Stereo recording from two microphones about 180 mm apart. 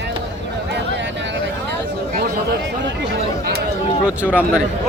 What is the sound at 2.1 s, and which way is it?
Chatter, 60° right (ahead or behind).